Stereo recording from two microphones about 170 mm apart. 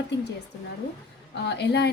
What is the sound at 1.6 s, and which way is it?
Speech, 80° left.